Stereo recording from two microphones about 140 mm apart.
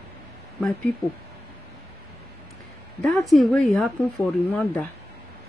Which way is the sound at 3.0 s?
Centre (ahead or behind).